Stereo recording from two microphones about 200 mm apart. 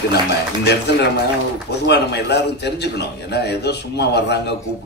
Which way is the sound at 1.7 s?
55° left (ahead or behind).